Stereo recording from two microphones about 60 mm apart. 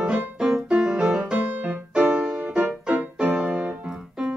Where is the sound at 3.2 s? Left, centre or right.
Centre.